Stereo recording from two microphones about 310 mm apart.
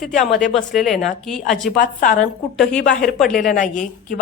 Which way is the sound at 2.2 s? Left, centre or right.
Centre.